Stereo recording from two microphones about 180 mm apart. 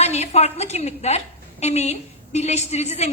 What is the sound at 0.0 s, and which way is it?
A woman's voice, 35° left (ahead or behind).